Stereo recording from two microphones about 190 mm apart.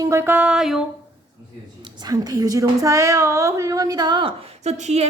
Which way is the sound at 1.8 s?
20° right (ahead or behind).